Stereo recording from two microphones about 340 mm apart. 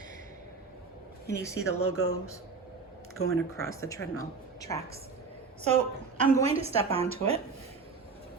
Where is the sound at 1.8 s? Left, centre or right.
Left.